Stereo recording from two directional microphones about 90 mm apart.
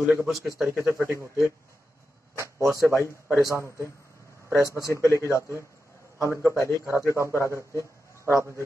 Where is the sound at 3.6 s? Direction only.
35° right (ahead or behind).